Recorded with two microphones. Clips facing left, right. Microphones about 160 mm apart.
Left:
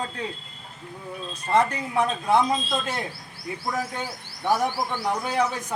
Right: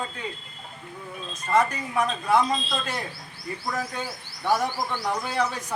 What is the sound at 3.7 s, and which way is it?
Speech, 15° left (ahead or behind).